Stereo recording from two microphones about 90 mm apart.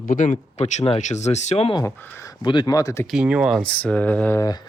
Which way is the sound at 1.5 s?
90° left.